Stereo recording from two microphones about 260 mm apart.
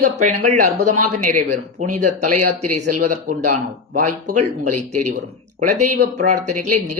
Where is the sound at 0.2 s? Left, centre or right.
Right.